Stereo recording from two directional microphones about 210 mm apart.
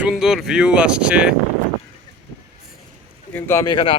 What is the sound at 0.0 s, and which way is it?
Speech, centre (ahead or behind).